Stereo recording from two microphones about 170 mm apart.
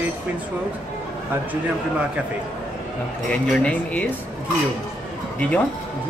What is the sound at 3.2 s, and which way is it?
Speech, 5° left (ahead or behind).